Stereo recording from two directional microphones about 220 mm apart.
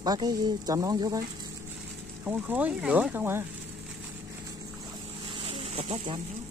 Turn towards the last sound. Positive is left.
turn(degrees=-25)  # may be behind; listen again after turning